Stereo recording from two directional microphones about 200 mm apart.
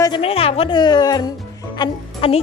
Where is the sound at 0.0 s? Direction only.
25° left (ahead or behind).